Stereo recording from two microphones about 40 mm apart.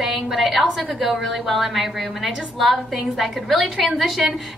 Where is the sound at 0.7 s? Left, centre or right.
Centre.